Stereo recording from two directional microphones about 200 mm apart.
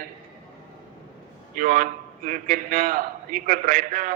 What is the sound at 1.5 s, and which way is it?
A man's voice, 40° right (ahead or behind).